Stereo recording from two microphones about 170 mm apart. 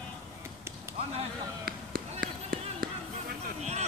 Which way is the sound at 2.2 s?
60° right (ahead or behind).